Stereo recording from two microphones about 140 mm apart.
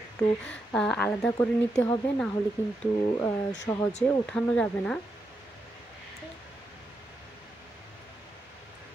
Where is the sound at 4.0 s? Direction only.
5° left (ahead or behind).